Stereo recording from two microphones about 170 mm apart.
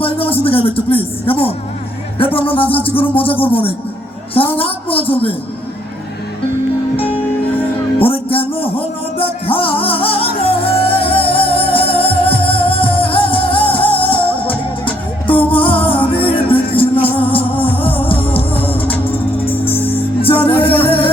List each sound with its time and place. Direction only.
0.0 s speech: 35° left (ahead or behind)
7.9 s music: 35° left (ahead or behind)
15.4 s music: 30° left (ahead or behind)
18.9 s music: 10° left (ahead or behind)
20.2 s music: 35° left (ahead or behind)